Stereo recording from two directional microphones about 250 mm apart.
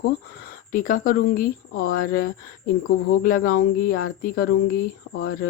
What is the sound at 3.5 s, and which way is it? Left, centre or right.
Speech, left.